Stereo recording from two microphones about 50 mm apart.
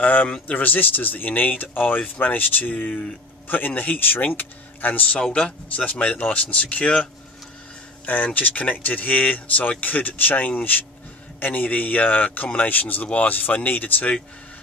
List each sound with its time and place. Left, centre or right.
0.0 s a sound: left
0.3 s speech: left
5.4 s speech: left
8.0 s speech: left